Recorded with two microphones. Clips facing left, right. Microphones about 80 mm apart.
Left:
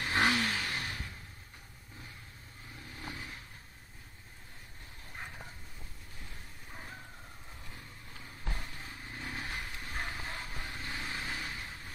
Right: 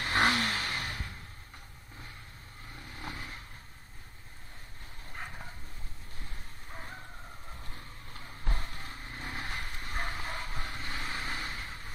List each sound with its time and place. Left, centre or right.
0.0 s vehicle: right
3.0 s vehicle: centre
5.1 s a sound: centre
9.0 s vehicle: centre